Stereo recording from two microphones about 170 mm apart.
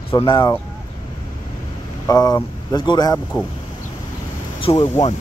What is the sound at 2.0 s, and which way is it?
Speech, 20° left (ahead or behind).